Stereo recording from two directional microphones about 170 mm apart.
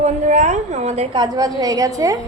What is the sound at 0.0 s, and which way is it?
A woman's voice, 40° right (ahead or behind).